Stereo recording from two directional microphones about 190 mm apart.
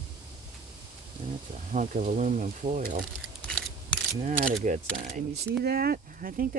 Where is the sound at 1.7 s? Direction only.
40° right (ahead or behind).